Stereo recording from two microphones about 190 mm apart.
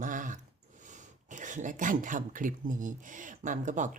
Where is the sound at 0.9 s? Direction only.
40° right (ahead or behind).